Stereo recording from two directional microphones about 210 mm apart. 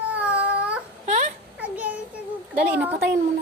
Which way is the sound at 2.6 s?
5° right (ahead or behind).